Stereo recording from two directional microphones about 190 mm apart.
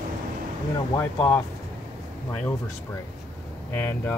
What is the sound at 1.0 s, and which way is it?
Speech, 10° left (ahead or behind).